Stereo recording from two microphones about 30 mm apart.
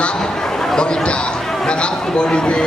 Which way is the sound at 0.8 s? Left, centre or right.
Left.